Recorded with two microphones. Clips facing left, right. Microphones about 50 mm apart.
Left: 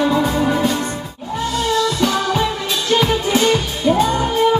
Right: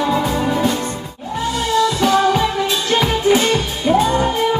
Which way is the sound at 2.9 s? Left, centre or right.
Right.